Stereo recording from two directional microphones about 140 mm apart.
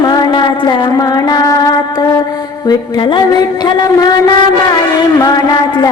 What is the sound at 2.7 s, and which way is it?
Music, 30° left (ahead or behind).